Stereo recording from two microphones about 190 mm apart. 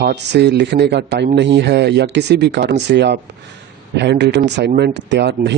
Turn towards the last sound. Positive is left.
turn(degrees=-60)  # may be behind; listen again after turning